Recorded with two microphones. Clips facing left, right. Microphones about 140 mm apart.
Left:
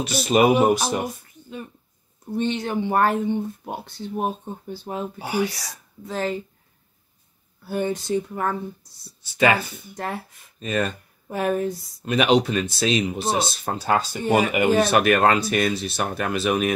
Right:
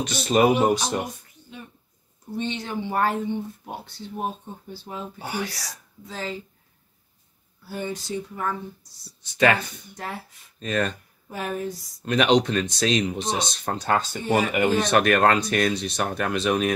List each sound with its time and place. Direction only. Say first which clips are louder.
0.0 s speech: left 1 dB; 10° left (ahead or behind)
2.3 s speech: left 5 dB; 50° left (ahead or behind)
5.2 s speech: left 6 dB; 10° left (ahead or behind)
6.0 s speech: left 7 dB; 55° left (ahead or behind)
7.6 s speech: left 6 dB; 55° left (ahead or behind)
9.2 s speech: left 1 dB; 5° left (ahead or behind)
11.2 s speech: left 6 dB; 50° left (ahead or behind)
12.0 s speech: left 1 dB; 5° left (ahead or behind)